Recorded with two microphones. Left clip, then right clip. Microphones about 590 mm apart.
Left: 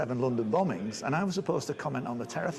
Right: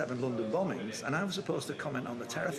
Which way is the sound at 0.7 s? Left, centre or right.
Left.